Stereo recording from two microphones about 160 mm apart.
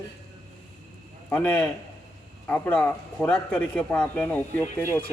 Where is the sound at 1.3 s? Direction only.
10° left (ahead or behind).